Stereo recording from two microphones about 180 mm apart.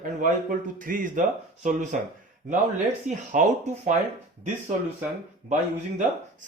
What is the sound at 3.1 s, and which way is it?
Speech, 45° right (ahead or behind).